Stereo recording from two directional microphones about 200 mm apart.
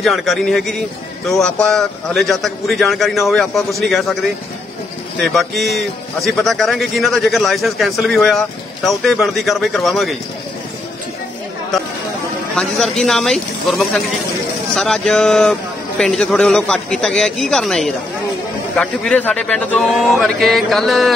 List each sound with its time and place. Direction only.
0.0 s a man's voice: centre (ahead or behind)
12.5 s a man's voice: centre (ahead or behind)